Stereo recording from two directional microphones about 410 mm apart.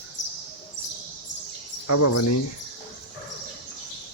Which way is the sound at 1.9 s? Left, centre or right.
Left.